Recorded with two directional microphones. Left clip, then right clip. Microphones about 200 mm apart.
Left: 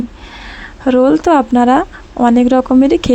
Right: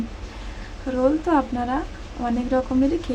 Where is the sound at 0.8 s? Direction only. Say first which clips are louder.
Left 11 dB; 40° left (ahead or behind).